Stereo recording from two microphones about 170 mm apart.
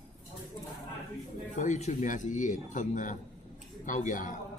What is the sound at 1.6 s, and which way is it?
A man's voice, 45° left (ahead or behind).